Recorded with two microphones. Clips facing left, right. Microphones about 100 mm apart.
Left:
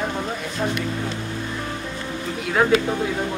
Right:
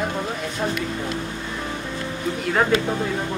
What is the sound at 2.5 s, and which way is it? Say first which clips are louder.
Speech: left 2 dB; centre (ahead or behind).